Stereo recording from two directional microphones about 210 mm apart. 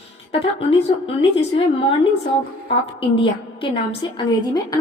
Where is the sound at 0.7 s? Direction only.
25° left (ahead or behind).